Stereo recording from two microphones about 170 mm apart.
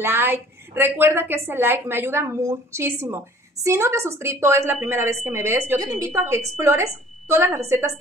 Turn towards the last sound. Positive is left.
turn(degrees=-15)  # may be behind; listen again after turning